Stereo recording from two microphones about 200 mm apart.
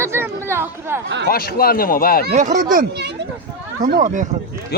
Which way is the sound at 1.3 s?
50° left (ahead or behind).